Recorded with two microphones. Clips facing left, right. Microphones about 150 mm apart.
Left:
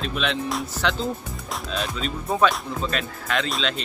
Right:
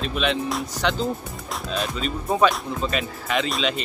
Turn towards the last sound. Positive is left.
turn(degrees=-5)  # may be behind; listen again after turning